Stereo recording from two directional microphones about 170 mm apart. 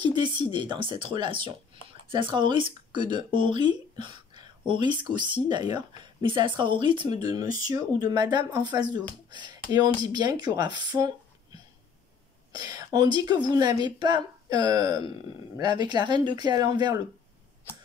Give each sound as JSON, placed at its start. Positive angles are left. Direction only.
{"t": 0.0, "sound": "speech", "side_deg": -25}
{"t": 12.5, "sound": "speech", "side_deg": -20}